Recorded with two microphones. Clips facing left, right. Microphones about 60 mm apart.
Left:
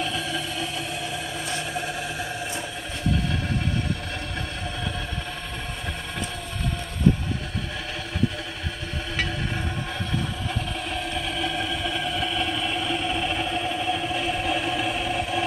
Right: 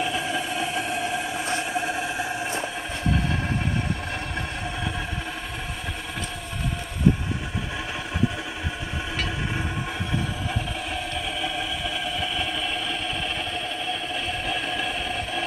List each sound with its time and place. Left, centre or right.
0.0 s a sound: right
1.7 s vehicle: centre
10.5 s vehicle: centre